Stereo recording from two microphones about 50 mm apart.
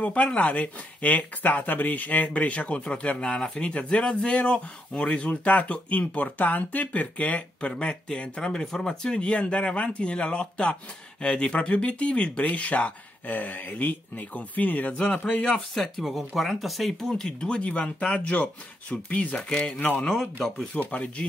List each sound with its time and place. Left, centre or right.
0.0 s speech: left
15.7 s speech: centre
20.9 s speech: left